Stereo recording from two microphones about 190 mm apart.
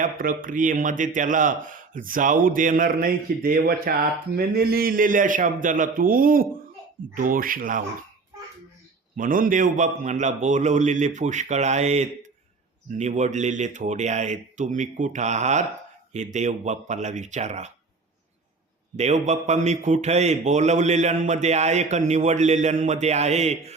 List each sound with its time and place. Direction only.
0.0 s speech: 45° right (ahead or behind)
9.1 s a man's voice: 45° right (ahead or behind)
18.9 s a man's voice: 35° right (ahead or behind)